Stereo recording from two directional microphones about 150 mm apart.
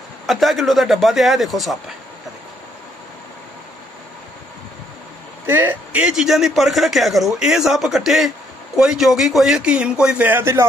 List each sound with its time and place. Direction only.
0.3 s a man's voice: centre (ahead or behind)
5.5 s a man's voice: 15° right (ahead or behind)